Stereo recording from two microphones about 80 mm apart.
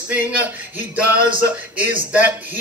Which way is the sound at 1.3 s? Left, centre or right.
Right.